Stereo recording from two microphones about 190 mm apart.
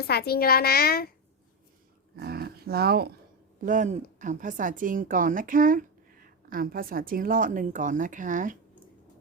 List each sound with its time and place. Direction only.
0.1 s a child's voice: 55° left (ahead or behind)
2.1 s a sound: 55° right (ahead or behind)
3.6 s a woman's voice: 45° right (ahead or behind)